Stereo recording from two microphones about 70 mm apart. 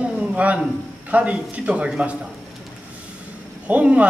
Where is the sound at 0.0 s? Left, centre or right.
Centre.